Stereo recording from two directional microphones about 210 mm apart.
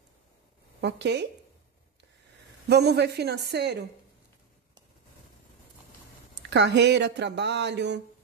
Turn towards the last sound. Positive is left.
turn(degrees=-55)  # may be behind; listen again after turning